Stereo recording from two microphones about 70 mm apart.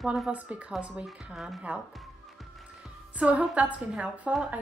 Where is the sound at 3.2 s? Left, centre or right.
Centre.